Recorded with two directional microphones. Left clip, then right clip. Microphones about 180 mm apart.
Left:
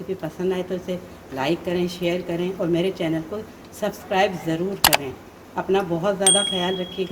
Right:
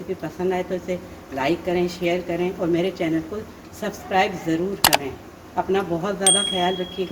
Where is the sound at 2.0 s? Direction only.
40° left (ahead or behind).